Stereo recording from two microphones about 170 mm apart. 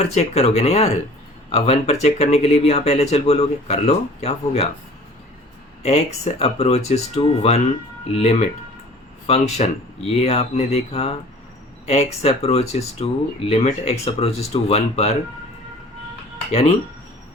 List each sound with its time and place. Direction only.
0.1 s speech: 40° left (ahead or behind)
5.8 s speech: 40° left (ahead or behind)
16.5 s speech: 35° left (ahead or behind)